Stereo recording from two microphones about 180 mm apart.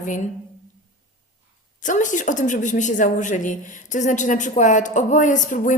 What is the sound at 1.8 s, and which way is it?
A woman's voice, 45° left (ahead or behind).